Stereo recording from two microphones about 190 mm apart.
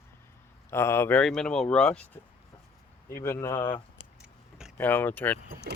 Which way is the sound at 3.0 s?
15° left (ahead or behind).